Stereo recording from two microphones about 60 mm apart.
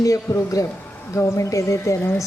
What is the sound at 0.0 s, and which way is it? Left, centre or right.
A man's voice, left.